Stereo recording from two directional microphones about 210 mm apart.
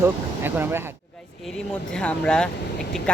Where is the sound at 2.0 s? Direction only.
5° left (ahead or behind).